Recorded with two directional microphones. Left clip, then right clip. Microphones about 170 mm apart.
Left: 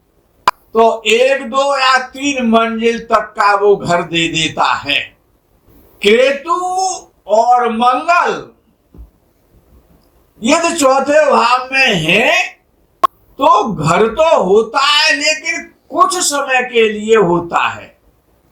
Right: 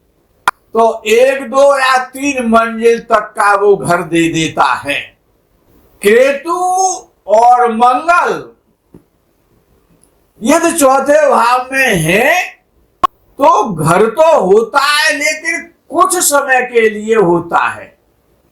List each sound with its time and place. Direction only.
0.7 s a man's voice: 45° right (ahead or behind)
10.5 s a man's voice: 45° right (ahead or behind)